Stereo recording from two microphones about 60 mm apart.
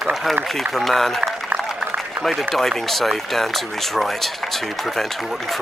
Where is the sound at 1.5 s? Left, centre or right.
Right.